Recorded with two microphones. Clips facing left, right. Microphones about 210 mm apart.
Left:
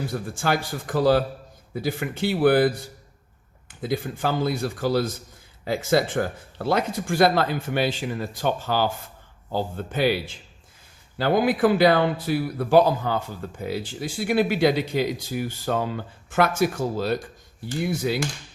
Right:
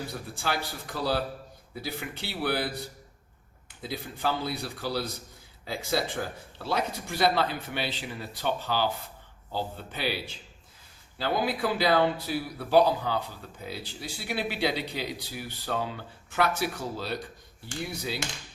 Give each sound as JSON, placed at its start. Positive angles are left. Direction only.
{"t": 0.1, "sound": "speech", "side_deg": 50}
{"t": 3.8, "sound": "speech", "side_deg": 50}